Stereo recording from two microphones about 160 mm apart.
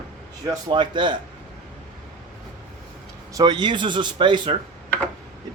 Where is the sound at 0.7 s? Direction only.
30° right (ahead or behind).